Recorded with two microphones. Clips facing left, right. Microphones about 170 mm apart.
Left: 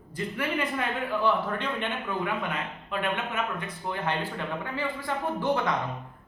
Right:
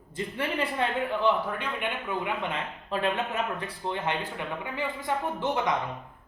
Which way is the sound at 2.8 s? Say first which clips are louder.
Right 3 dB; 35° right (ahead or behind).